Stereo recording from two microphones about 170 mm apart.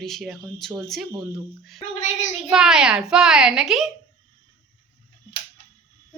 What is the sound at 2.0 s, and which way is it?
Speech, 45° left (ahead or behind).